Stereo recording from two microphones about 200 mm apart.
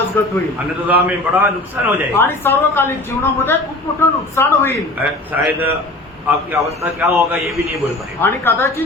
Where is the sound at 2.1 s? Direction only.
10° left (ahead or behind).